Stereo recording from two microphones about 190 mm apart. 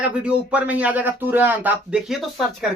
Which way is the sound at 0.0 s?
5° right (ahead or behind).